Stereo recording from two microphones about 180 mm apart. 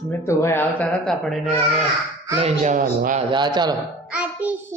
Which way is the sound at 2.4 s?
40° right (ahead or behind).